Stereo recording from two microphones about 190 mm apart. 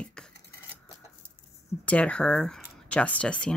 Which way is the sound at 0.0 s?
5° left (ahead or behind).